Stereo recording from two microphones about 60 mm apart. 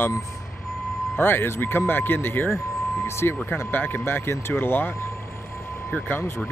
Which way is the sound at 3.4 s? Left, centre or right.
Left.